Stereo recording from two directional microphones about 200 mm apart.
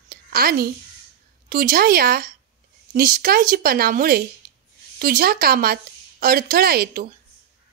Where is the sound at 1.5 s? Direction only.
45° right (ahead or behind).